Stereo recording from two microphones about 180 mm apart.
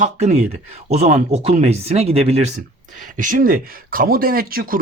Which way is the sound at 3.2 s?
50° right (ahead or behind).